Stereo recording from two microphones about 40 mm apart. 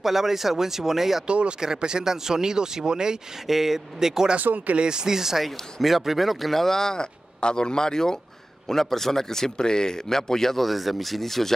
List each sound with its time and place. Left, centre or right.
0.0 s speech: centre
1.2 s speech: right
1.6 s speech: centre
3.4 s speech: centre
5.4 s a man's voice: centre